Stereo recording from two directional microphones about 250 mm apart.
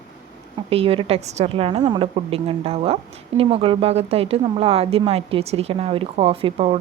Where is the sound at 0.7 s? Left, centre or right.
Right.